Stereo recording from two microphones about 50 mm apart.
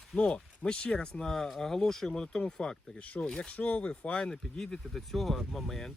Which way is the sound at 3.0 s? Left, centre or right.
Left.